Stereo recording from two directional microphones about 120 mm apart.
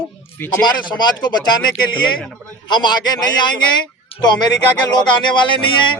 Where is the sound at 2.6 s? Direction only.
40° left (ahead or behind).